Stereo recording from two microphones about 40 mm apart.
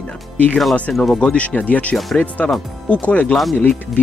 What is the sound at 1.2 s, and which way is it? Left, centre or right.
Speech, left.